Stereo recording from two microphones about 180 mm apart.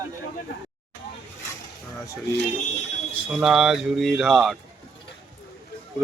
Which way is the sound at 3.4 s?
5° right (ahead or behind).